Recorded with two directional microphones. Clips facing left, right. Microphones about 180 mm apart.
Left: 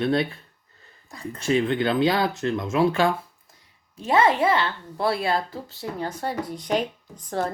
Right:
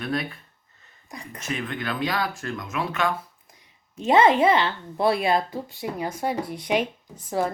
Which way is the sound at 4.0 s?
20° right (ahead or behind).